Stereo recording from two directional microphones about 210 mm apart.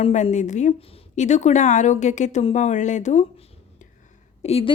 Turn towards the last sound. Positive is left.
turn(degrees=30)  # may be behind; listen again after turning